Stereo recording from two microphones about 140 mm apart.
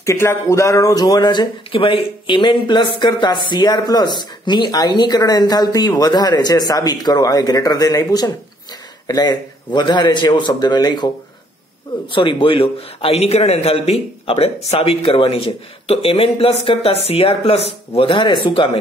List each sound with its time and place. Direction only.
0.0 s a man's voice: 20° left (ahead or behind)
12.1 s a man's voice: 35° left (ahead or behind)